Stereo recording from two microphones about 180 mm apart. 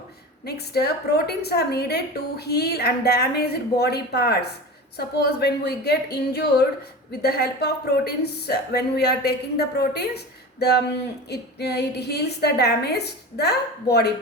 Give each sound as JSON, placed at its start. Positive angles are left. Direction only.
{"t": 0.4, "sound": "a woman's voice", "side_deg": 65}